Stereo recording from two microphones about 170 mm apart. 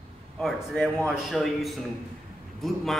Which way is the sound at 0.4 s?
5° left (ahead or behind).